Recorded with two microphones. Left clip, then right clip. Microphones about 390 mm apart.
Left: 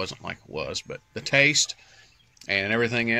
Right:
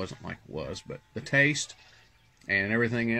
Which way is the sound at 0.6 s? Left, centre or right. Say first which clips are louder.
Left 6 dB; left.